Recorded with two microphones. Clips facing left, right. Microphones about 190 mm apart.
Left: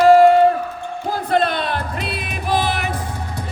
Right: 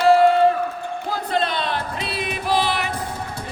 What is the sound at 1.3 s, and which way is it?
Music, 50° left (ahead or behind).